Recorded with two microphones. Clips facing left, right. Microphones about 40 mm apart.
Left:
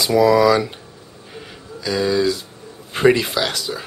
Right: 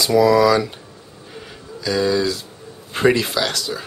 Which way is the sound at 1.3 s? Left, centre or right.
Centre.